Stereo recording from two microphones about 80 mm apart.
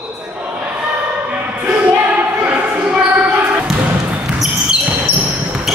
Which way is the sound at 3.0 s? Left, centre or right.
Centre.